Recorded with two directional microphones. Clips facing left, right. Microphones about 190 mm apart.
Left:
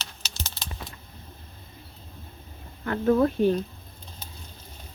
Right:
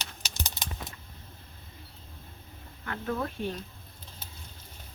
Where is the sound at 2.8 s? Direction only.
40° left (ahead or behind).